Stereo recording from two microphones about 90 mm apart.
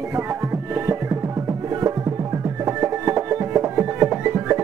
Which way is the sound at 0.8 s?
30° right (ahead or behind).